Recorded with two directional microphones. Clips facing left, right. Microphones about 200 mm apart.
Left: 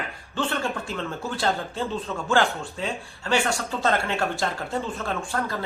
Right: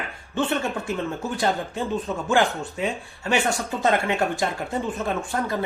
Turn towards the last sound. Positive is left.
turn(degrees=-20)  # may be behind; listen again after turning